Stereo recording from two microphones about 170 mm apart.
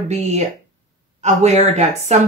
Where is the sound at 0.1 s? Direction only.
40° right (ahead or behind).